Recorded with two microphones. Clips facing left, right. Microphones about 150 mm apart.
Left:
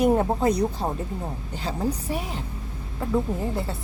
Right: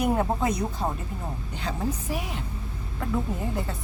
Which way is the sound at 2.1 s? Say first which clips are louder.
Left 2 dB; 30° left (ahead or behind).